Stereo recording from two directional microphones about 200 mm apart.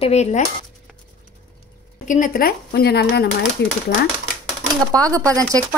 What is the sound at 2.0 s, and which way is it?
Speech, 40° left (ahead or behind).